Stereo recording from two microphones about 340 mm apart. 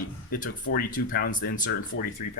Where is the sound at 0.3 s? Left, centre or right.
Left.